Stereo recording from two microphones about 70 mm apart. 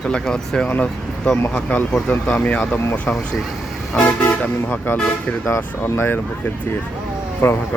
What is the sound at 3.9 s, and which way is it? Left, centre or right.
Speech, left.